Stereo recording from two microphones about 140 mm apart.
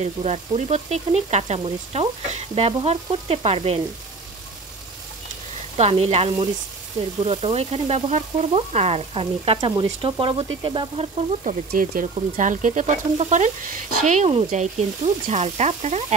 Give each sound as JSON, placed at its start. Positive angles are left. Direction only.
{"t": 0.0, "sound": "frying", "side_deg": -50}
{"t": 5.8, "sound": "frying", "side_deg": -45}
{"t": 10.0, "sound": "speech", "side_deg": -40}
{"t": 11.7, "sound": "speech", "side_deg": -75}
{"t": 14.5, "sound": "frying", "side_deg": -55}